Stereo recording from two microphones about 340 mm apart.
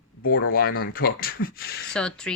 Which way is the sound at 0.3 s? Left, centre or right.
Left.